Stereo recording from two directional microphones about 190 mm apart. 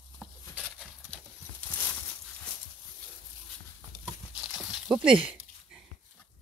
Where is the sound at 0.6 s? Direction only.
Centre (ahead or behind).